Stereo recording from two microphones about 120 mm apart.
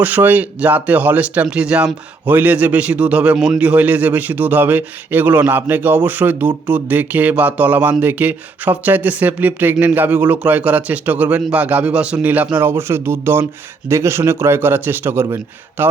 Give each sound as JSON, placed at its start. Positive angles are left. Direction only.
{"t": 0.0, "sound": "speech", "side_deg": -15}